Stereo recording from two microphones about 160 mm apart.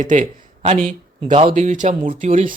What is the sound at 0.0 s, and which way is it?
Speech, 55° right (ahead or behind).